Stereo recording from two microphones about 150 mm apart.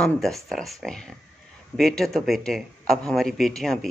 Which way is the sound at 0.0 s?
Centre (ahead or behind).